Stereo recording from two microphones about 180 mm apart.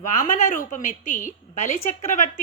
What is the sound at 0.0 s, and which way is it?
A woman's voice, 45° left (ahead or behind).